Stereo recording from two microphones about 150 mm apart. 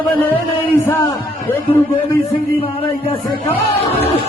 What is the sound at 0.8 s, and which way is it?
Speech, 15° left (ahead or behind).